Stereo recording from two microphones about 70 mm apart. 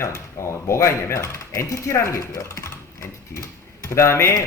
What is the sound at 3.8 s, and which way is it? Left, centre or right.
Speech, left.